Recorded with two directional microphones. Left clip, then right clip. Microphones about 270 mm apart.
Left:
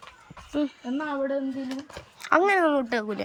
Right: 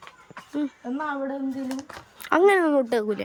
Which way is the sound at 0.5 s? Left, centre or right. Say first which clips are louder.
Left 1 dB; centre.